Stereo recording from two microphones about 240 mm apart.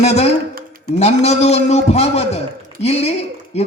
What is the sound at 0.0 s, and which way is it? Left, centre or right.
Speech, left.